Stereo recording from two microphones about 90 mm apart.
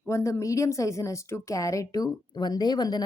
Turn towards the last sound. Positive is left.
turn(degrees=50)  # may be behind; listen again after turning